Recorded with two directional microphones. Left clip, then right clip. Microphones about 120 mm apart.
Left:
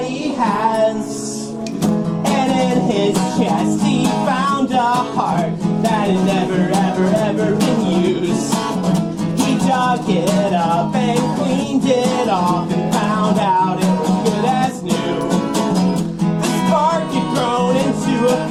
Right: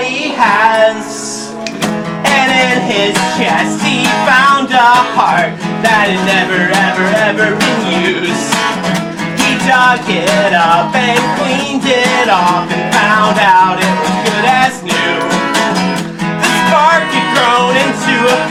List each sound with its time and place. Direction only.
0.4 s female singing: 35° right (ahead or behind)
2.2 s music: 25° right (ahead or behind)
5.9 s speech: 40° right (ahead or behind)
7.0 s speech: 30° right (ahead or behind)
9.4 s music: 30° right (ahead or behind)
16.6 s music: 30° right (ahead or behind)